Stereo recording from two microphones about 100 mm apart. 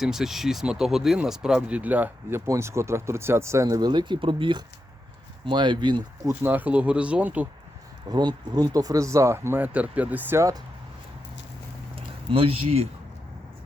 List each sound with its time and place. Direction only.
0.0 s speech: 5° right (ahead or behind)
2.5 s speech: 30° right (ahead or behind); by 6.0 s 50° right (ahead or behind)
6.2 s speech: 20° right (ahead or behind)
8.1 s speech: 45° right (ahead or behind); by 10.4 s 20° right (ahead or behind)
11.9 s speech: 70° right (ahead or behind); by 12.9 s 85° right